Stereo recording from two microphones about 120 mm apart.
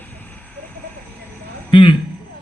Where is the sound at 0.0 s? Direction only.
15° left (ahead or behind).